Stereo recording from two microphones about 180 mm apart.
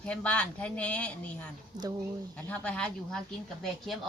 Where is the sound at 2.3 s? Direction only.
5° left (ahead or behind).